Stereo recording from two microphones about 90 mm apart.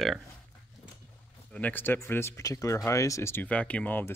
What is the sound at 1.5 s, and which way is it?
Speech, 20° left (ahead or behind).